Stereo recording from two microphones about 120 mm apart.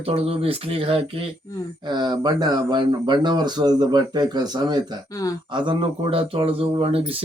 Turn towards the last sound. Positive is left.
turn(degrees=-50)  # may be behind; listen again after turning